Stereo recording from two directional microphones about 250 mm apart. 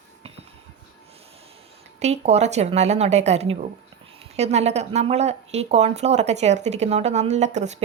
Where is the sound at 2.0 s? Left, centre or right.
Right.